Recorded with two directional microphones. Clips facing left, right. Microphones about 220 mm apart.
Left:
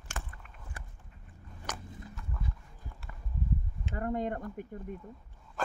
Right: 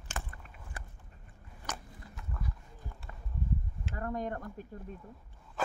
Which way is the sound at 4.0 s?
20° left (ahead or behind).